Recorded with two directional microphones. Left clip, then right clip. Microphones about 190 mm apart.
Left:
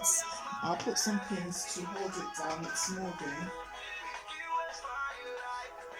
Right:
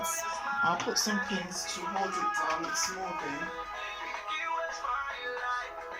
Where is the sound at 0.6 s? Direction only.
50° left (ahead or behind).